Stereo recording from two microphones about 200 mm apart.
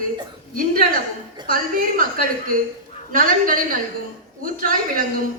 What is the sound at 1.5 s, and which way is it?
A man's voice, 45° right (ahead or behind).